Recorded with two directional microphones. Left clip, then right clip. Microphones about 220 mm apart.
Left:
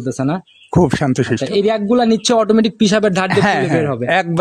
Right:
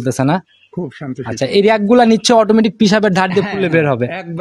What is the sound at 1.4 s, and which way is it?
Speech, 25° right (ahead or behind).